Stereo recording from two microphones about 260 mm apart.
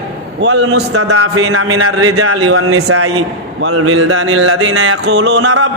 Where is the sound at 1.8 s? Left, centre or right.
Right.